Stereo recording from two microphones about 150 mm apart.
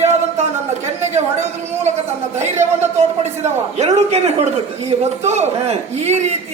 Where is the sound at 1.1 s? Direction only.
50° right (ahead or behind).